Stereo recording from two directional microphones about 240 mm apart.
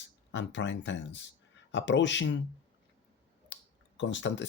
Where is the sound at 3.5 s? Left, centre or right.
Left.